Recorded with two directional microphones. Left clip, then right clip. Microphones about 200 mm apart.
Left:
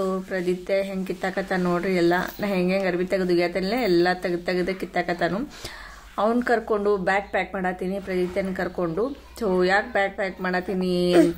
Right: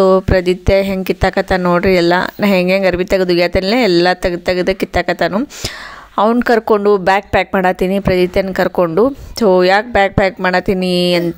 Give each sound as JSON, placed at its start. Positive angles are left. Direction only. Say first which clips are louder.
{"t": 0.0, "sound": "speech", "louder": "right 15 dB", "side_deg": -45}